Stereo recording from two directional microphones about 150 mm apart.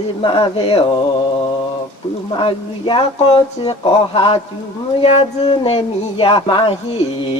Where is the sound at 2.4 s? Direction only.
35° left (ahead or behind).